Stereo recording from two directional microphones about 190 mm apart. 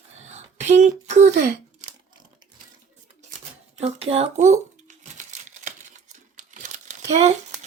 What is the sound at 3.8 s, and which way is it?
Crumpling, 35° right (ahead or behind).